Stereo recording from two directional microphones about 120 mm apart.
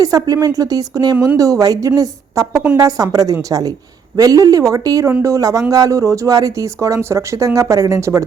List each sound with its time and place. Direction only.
0.0 s speech: 30° right (ahead or behind)